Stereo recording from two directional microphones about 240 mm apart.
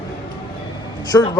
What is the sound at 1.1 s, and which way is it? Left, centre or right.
Speech, centre.